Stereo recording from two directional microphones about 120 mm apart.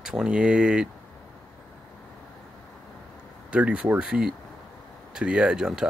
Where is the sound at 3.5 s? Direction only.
10° right (ahead or behind).